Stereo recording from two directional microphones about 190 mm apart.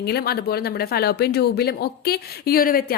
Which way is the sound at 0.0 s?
55° left (ahead or behind).